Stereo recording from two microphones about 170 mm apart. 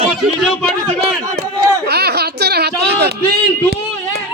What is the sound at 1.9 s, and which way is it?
A child's voice, 70° right (ahead or behind).